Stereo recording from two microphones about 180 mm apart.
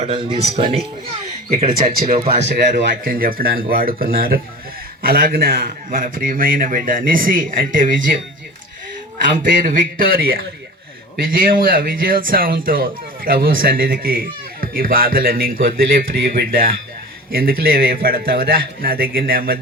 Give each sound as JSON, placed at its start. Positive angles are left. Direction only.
{"t": 0.0, "sound": "speech", "side_deg": -30}
{"t": 1.6, "sound": "speech", "side_deg": -50}
{"t": 2.4, "sound": "a man's voice", "side_deg": -70}
{"t": 9.2, "sound": "a man's voice", "side_deg": -50}